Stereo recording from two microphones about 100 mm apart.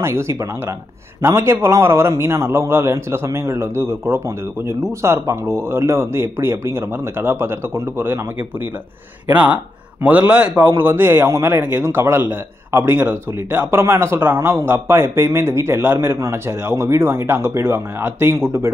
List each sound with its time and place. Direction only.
0.0 s a man's voice: 30° right (ahead or behind)